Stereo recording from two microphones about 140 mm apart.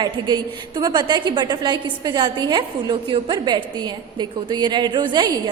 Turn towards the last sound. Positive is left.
turn(degrees=-30)  # may be behind; listen again after turning